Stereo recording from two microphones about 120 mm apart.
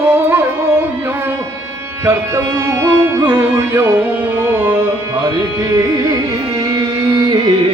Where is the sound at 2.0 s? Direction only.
20° right (ahead or behind); by 7.4 s 35° right (ahead or behind).